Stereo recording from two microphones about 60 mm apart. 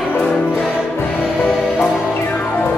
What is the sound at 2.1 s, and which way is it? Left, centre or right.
Music, left.